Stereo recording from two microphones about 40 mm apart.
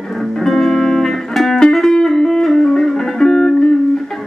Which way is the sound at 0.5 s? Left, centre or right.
Centre.